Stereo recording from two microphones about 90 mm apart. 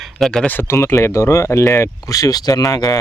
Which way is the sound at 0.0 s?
5° left (ahead or behind).